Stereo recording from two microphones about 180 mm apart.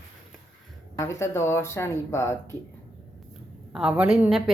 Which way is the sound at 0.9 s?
15° left (ahead or behind).